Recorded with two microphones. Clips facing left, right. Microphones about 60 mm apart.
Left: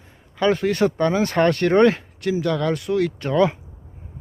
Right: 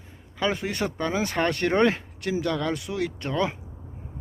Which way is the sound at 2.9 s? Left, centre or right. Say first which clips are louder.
Left 9 dB; centre.